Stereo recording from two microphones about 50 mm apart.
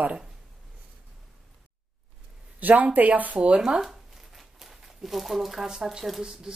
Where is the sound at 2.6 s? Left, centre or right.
Right; by 3.8 s centre.